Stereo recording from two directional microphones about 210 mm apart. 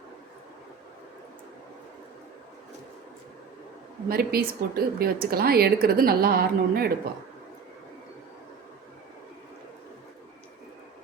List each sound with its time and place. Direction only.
4.1 s speech: 45° right (ahead or behind)